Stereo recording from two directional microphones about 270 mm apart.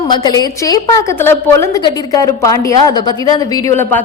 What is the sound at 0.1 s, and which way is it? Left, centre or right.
A woman's voice, centre.